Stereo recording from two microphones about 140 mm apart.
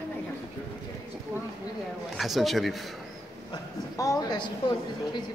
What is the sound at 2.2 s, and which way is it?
Speech, centre (ahead or behind).